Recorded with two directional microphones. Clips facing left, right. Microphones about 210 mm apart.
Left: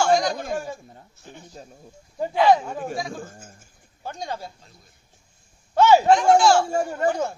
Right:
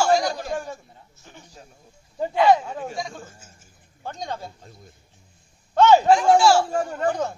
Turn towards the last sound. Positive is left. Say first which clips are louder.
# left 1 dB
turn(degrees=10)  # may be behind; listen again after turning